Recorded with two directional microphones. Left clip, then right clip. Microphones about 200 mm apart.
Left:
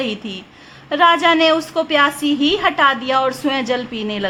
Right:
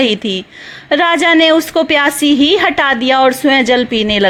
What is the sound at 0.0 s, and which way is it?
A woman's voice, 30° right (ahead or behind).